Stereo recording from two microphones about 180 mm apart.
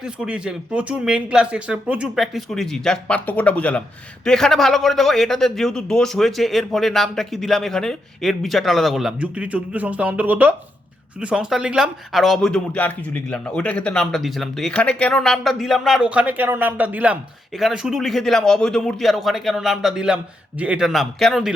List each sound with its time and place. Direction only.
0.0 s speech: 5° right (ahead or behind)